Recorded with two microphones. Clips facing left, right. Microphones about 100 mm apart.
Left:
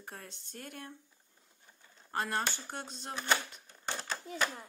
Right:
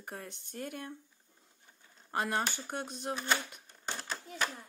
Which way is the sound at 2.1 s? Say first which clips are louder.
Right 1 dB; 15° right (ahead or behind).